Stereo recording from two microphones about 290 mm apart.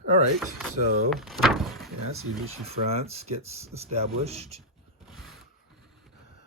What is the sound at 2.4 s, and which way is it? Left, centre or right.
Speech, right.